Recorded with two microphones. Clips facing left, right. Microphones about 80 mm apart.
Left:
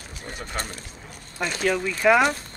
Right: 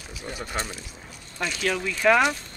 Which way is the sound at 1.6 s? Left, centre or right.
Centre.